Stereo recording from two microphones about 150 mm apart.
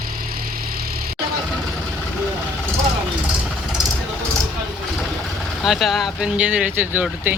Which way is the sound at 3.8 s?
30° right (ahead or behind).